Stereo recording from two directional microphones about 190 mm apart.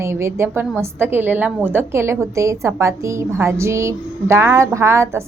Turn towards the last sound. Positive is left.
turn(degrees=-15)  # may be behind; listen again after turning